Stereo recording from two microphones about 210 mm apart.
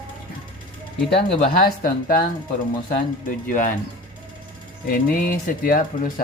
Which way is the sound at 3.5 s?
40° left (ahead or behind).